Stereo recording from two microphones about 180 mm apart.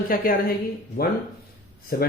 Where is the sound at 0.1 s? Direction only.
55° left (ahead or behind).